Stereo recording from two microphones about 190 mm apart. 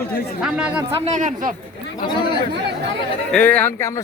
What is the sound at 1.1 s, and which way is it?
Speech, 40° right (ahead or behind).